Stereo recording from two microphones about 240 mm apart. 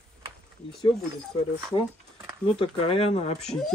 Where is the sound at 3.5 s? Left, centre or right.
Centre.